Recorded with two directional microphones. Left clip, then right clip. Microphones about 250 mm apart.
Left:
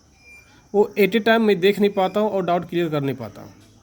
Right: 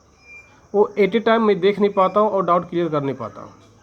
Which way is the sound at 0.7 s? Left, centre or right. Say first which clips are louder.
Right 1 dB; left.